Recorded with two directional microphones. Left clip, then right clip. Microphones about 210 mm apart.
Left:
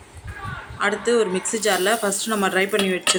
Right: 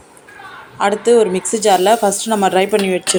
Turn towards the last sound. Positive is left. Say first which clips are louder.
# right 5 dB
turn(degrees=-15)  # may be behind; listen again after turning